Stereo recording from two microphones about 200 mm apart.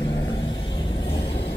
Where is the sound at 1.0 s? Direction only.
25° left (ahead or behind).